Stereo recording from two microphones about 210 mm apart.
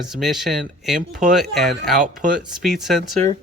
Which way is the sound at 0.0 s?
Centre (ahead or behind).